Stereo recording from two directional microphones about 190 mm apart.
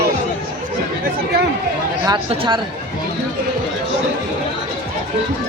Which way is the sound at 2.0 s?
30° right (ahead or behind).